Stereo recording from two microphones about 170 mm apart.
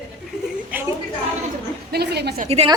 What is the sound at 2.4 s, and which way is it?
Speech, 35° right (ahead or behind).